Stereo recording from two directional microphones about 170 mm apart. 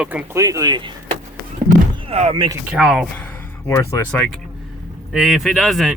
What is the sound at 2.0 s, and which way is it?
Speech, 35° right (ahead or behind).